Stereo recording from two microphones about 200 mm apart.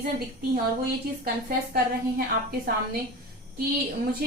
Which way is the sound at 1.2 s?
50° right (ahead or behind).